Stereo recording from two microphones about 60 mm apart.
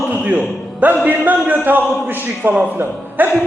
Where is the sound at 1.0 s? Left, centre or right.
Right.